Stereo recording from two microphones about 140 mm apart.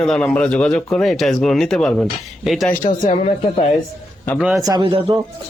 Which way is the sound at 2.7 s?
70° left (ahead or behind).